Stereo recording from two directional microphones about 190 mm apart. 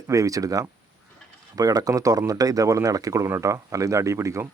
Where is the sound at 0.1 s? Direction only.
20° right (ahead or behind).